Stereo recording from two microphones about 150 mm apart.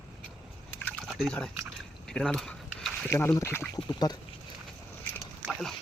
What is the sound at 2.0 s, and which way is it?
Biting, 5° left (ahead or behind).